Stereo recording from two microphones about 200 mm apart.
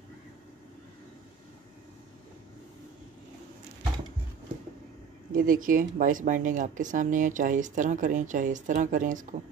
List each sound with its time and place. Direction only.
5.3 s speech: 45° right (ahead or behind)